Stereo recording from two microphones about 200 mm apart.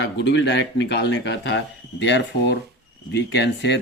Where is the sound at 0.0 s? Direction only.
60° left (ahead or behind).